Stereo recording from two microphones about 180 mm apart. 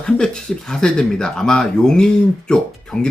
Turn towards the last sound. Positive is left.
turn(degrees=5)  # may be behind; listen again after turning